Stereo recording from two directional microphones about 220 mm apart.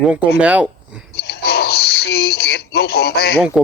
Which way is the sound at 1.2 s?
45° left (ahead or behind).